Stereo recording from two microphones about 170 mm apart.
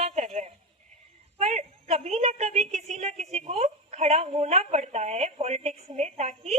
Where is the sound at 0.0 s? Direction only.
40° right (ahead or behind).